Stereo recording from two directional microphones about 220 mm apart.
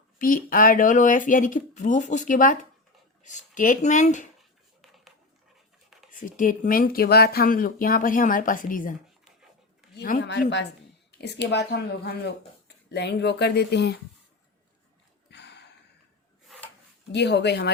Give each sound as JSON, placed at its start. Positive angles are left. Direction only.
{"t": 0.2, "sound": "speech", "side_deg": 40}
{"t": 6.1, "sound": "speech", "side_deg": 35}
{"t": 15.3, "sound": "gasp", "side_deg": 50}
{"t": 17.1, "sound": "speech", "side_deg": 50}